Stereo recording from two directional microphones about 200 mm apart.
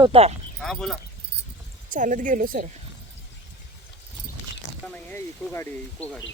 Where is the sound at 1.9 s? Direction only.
40° right (ahead or behind).